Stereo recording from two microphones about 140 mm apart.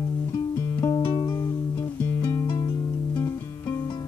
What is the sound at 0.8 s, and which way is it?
Music, 30° left (ahead or behind).